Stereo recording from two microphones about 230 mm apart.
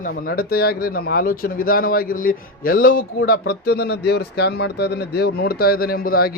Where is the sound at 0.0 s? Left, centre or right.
Left.